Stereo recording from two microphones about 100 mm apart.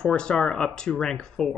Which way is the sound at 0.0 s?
5° left (ahead or behind).